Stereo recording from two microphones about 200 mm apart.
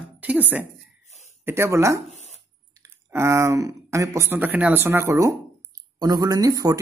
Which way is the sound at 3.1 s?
15° right (ahead or behind).